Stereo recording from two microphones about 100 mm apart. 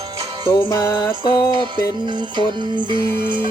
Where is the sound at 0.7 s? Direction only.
25° left (ahead or behind).